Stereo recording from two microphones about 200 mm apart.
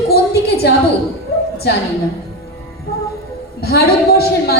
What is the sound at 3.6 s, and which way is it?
Speech, 50° left (ahead or behind).